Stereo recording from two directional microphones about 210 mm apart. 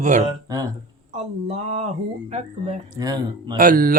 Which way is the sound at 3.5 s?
40° right (ahead or behind).